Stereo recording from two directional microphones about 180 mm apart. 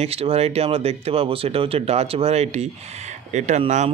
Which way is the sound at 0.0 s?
35° right (ahead or behind).